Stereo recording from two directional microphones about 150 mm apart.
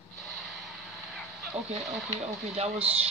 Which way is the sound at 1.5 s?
40° right (ahead or behind).